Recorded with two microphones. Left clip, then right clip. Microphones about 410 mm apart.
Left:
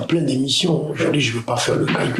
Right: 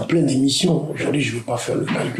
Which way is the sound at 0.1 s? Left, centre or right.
Left.